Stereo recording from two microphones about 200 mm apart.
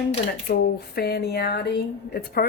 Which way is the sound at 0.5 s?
50° left (ahead or behind).